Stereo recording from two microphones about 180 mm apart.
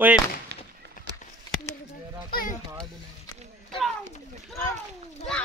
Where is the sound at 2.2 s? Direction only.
55° left (ahead or behind).